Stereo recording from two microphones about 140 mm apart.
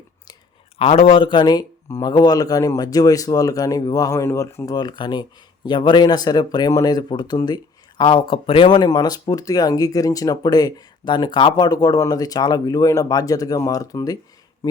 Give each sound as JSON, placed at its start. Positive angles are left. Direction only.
{"t": 0.8, "sound": "speech", "side_deg": 45}